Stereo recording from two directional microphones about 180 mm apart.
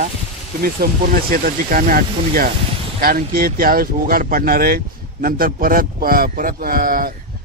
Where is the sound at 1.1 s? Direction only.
50° right (ahead or behind).